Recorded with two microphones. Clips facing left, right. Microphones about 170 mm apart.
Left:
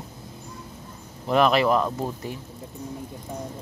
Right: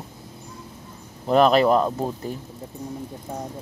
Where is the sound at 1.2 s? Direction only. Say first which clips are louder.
Right 3 dB; 35° right (ahead or behind).